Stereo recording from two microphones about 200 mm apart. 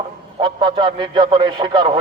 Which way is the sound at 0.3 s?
25° right (ahead or behind).